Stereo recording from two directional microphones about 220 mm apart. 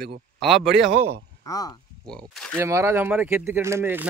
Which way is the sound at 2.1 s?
5° left (ahead or behind).